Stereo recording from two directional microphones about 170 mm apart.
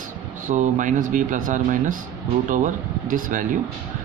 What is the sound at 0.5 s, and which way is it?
Speech, 45° right (ahead or behind).